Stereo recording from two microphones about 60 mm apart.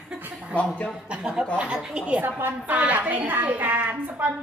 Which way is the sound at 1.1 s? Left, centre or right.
Centre.